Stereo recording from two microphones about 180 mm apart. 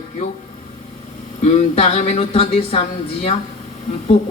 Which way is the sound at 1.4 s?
40° left (ahead or behind).